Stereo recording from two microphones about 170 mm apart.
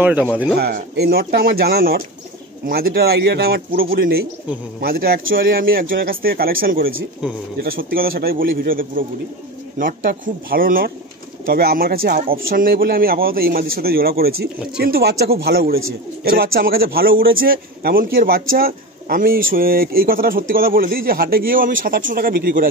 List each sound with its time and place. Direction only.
0.0 s a man's voice: 10° right (ahead or behind)
0.6 s a man's voice: 65° right (ahead or behind)